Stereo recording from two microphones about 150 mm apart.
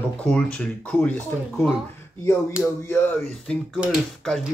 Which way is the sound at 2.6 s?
15° left (ahead or behind).